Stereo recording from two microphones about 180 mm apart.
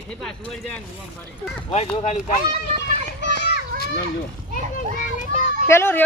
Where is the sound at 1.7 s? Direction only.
35° left (ahead or behind).